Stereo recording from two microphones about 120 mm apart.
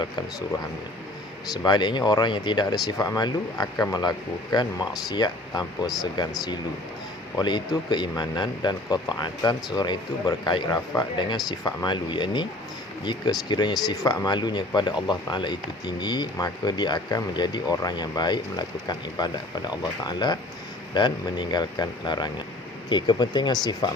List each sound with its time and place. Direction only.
1.6 s speech: 40° left (ahead or behind)